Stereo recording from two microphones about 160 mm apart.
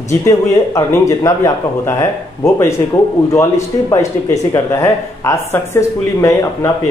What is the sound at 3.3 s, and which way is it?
Speech, 20° left (ahead or behind).